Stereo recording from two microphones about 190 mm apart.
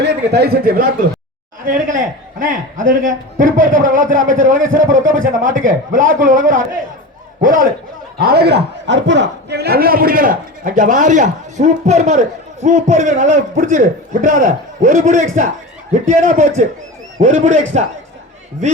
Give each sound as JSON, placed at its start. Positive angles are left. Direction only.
{"t": 0.0, "sound": "a man's voice", "side_deg": -65}